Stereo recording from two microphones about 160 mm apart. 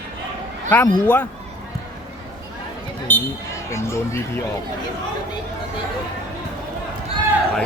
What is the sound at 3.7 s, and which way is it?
Speech, 15° left (ahead or behind).